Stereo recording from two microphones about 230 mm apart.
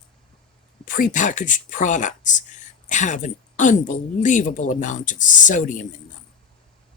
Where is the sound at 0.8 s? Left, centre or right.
Left.